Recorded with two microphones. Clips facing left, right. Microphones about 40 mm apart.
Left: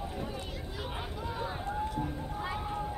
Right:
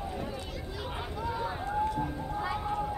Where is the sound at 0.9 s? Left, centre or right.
Centre.